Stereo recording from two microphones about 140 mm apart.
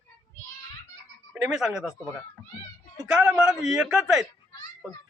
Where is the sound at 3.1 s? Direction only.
5° right (ahead or behind).